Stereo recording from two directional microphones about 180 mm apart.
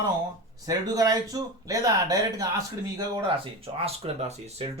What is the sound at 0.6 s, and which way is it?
Speech, 20° right (ahead or behind).